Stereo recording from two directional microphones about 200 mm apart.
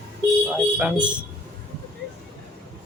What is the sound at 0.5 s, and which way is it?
Speech, 5° right (ahead or behind).